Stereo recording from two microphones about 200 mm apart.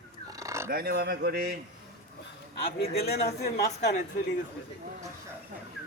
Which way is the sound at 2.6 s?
50° left (ahead or behind).